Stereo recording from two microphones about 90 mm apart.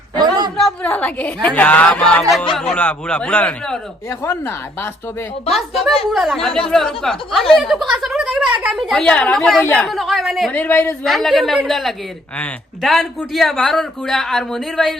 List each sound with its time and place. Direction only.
0.2 s a sound: 50° right (ahead or behind)
0.5 s a sound: 5° left (ahead or behind)
0.9 s a woman's voice: 15° left (ahead or behind)
2.7 s a woman's voice: 15° left (ahead or behind)
4.2 s speech: 30° left (ahead or behind)
5.5 s a woman's voice: centre (ahead or behind)
9.6 s a woman's voice: 15° left (ahead or behind)
9.9 s a woman's voice: centre (ahead or behind)
10.5 s speech: 20° left (ahead or behind)
11.0 s a woman's voice: centre (ahead or behind)